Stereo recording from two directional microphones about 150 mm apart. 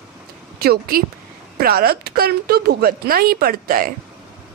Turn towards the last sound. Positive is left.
turn(degrees=-75)  # may be behind; listen again after turning